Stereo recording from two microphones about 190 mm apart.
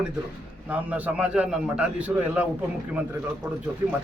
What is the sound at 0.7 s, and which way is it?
A man's voice, 5° right (ahead or behind).